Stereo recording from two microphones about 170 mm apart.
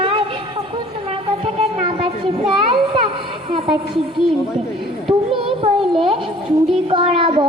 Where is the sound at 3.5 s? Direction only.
30° right (ahead or behind).